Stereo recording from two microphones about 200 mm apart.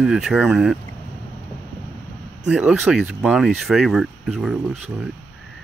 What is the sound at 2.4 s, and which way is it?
Speech, 5° right (ahead or behind).